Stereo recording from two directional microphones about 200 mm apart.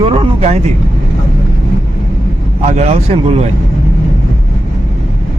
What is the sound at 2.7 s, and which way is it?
Speech, 35° right (ahead or behind).